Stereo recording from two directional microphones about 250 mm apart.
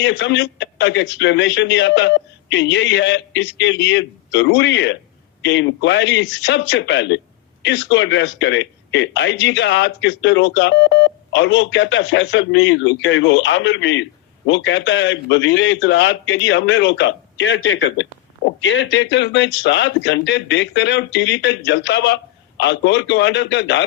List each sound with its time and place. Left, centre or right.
0.0 s a man's voice: left